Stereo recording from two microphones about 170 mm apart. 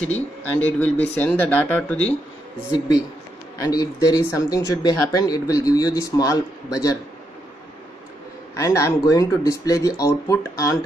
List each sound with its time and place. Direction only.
0.4 s speech: 10° left (ahead or behind)
3.5 s speech: 20° left (ahead or behind)
8.5 s speech: 15° left (ahead or behind)